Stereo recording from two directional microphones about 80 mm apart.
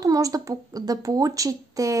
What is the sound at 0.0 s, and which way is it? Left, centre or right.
Speech, right.